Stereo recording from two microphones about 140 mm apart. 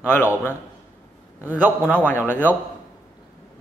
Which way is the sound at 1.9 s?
15° left (ahead or behind).